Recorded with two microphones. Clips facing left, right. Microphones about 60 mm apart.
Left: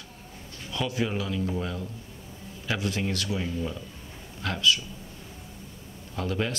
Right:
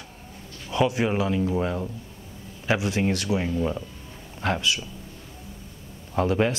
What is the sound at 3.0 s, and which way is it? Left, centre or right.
Speech, right.